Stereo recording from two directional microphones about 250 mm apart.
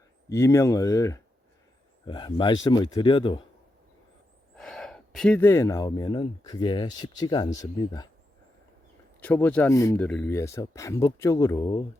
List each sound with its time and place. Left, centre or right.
0.3 s speech: centre
4.5 s speech: centre
9.2 s speech: centre